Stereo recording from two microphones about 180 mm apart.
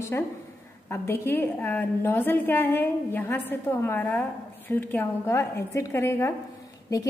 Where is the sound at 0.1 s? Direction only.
15° left (ahead or behind).